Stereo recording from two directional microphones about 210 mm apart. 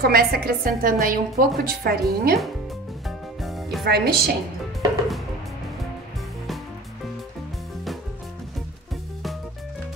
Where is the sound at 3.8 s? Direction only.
50° right (ahead or behind).